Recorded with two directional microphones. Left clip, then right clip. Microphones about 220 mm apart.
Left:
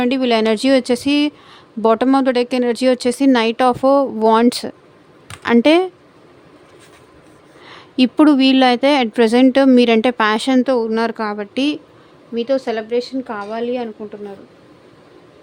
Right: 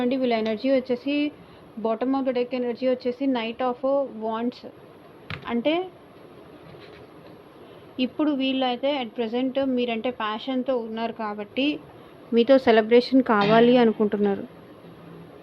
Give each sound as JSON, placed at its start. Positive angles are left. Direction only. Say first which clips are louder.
{"t": 0.0, "sound": "speech", "louder": "left 8 dB", "side_deg": 40}
{"t": 7.9, "sound": "speech", "louder": "left 12 dB", "side_deg": 55}
{"t": 12.3, "sound": "a woman's voice", "louder": "right 1 dB", "side_deg": 0}